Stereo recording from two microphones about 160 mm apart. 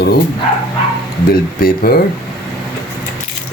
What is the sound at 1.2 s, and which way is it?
Speech, 70° left (ahead or behind).